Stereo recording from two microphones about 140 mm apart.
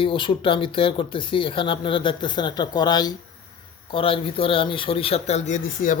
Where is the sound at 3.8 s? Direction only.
40° left (ahead or behind).